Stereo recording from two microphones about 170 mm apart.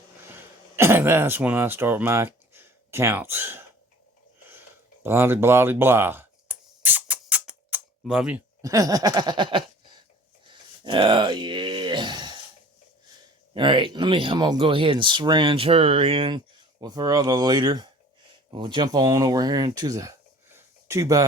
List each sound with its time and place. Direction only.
0.8 s speech: 15° right (ahead or behind)
5.0 s a sound: 15° right (ahead or behind)
8.6 s speech: 20° right (ahead or behind)
10.5 s groan: 30° right (ahead or behind)
13.5 s speech: 30° right (ahead or behind)